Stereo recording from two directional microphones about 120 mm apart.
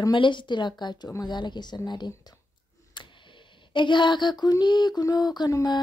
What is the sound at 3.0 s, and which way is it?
Tick, 40° left (ahead or behind).